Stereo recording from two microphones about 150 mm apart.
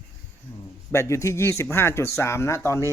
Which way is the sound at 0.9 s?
20° left (ahead or behind).